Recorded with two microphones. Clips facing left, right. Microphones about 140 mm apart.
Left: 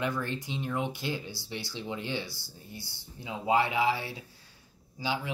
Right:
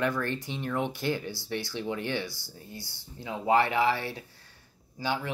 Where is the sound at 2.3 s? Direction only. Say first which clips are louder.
Right 1 dB; 20° right (ahead or behind).